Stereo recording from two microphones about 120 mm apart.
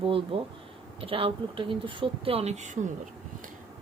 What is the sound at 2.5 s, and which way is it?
Speech, 90° right.